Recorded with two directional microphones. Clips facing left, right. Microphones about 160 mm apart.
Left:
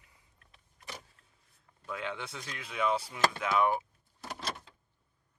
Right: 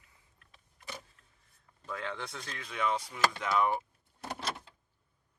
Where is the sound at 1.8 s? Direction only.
5° left (ahead or behind).